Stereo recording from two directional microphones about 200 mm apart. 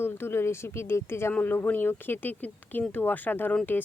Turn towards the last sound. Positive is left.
turn(degrees=10)  # may be behind; listen again after turning